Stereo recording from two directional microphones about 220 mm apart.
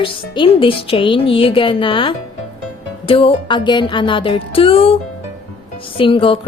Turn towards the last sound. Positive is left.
turn(degrees=25)  # may be behind; listen again after turning